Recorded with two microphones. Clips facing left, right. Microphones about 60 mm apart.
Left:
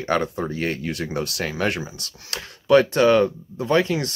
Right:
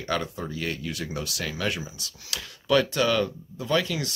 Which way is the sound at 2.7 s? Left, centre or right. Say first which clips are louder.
Left 7 dB; left.